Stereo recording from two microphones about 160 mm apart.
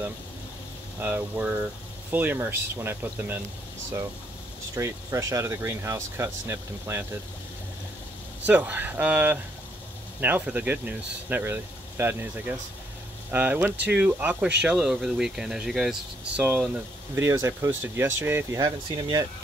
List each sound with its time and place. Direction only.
1.0 s speech: 10° right (ahead or behind)
4.7 s speech: 20° right (ahead or behind)
8.5 s speech: 10° right (ahead or behind)
18.6 s speech: 25° right (ahead or behind)